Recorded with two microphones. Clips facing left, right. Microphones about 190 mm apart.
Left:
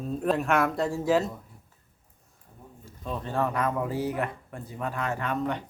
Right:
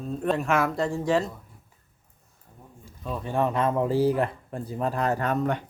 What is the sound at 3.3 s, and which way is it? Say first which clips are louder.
Speech: right 3 dB; 20° right (ahead or behind).